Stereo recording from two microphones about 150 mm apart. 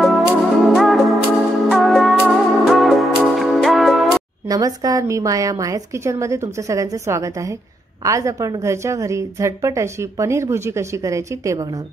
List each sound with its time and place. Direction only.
0.0 s music: centre (ahead or behind)
4.5 s a woman's voice: 25° right (ahead or behind)